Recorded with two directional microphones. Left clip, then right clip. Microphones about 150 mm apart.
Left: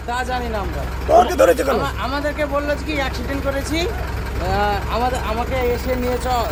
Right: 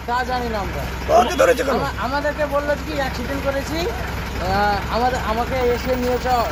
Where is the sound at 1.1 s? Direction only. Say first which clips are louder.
Left 2 dB; 25° left (ahead or behind).